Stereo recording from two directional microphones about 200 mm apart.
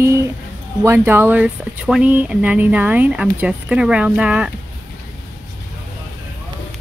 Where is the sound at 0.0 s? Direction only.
15° right (ahead or behind).